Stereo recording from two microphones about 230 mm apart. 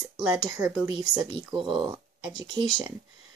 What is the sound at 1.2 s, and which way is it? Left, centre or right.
Speech, right.